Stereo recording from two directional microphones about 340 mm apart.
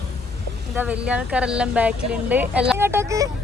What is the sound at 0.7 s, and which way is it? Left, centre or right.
Speech, centre.